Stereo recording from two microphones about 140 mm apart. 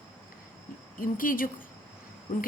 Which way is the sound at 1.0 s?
80° left.